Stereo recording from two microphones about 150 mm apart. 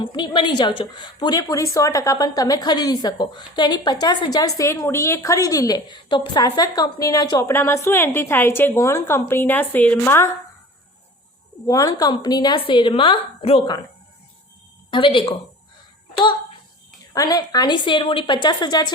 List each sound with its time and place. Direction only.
0.0 s a woman's voice: 30° left (ahead or behind); by 10.2 s 15° left (ahead or behind)
11.6 s a woman's voice: 25° left (ahead or behind)
14.8 s speech: 35° left (ahead or behind)
17.2 s a woman's voice: 25° left (ahead or behind)